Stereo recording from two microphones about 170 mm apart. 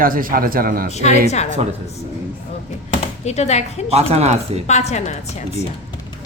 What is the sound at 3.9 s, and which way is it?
Speech, 40° right (ahead or behind).